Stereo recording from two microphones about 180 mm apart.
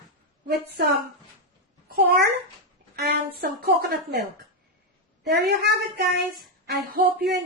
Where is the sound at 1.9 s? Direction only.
60° right (ahead or behind).